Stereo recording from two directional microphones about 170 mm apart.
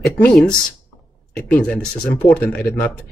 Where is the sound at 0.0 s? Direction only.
Centre (ahead or behind).